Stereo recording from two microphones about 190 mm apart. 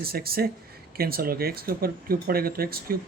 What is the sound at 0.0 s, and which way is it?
Speech, 50° right (ahead or behind).